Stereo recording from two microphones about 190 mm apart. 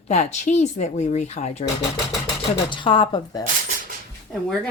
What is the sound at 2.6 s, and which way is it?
Speech, 25° left (ahead or behind).